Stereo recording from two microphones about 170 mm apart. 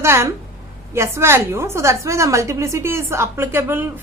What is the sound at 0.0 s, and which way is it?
A woman's voice, 15° right (ahead or behind).